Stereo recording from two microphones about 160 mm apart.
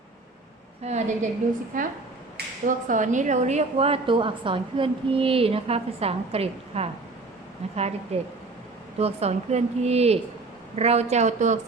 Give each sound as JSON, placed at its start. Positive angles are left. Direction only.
{"t": 0.9, "sound": "a woman's voice", "side_deg": -45}
{"t": 1.7, "sound": "a woman's voice", "side_deg": -55}